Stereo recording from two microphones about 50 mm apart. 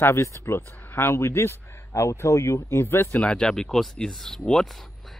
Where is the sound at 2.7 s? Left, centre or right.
Left.